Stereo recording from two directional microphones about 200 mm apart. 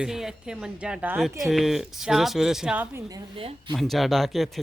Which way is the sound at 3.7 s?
Centre (ahead or behind).